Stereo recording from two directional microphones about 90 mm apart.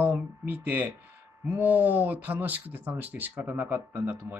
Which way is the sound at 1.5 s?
20° right (ahead or behind).